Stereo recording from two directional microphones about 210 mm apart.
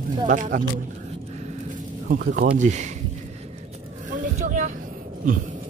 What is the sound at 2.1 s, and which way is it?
Speech, 45° right (ahead or behind).